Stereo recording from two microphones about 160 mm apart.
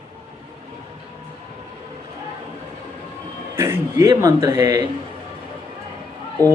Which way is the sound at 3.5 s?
15° right (ahead or behind).